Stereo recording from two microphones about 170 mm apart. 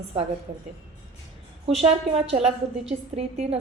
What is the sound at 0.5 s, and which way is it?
A woman's voice, 40° right (ahead or behind).